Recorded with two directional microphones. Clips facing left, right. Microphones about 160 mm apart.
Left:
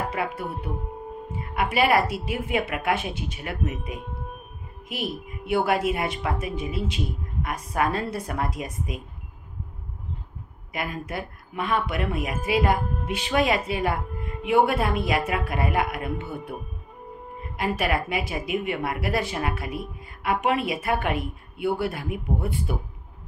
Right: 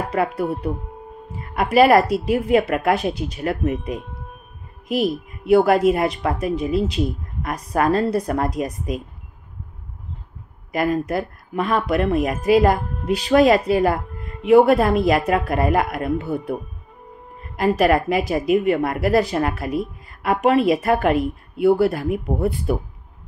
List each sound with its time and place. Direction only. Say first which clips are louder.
0.1 s a woman's voice: right 8 dB; 40° right (ahead or behind)
1.5 s a woman's voice: right 8 dB; 40° right (ahead or behind)
4.8 s a woman's voice: right 10 dB; 40° right (ahead or behind)
10.7 s a woman's voice: right 11 dB; 40° right (ahead or behind)
17.6 s a woman's voice: right 9 dB; 40° right (ahead or behind)